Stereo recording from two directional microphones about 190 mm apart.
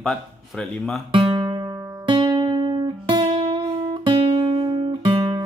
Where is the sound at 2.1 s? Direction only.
25° right (ahead or behind).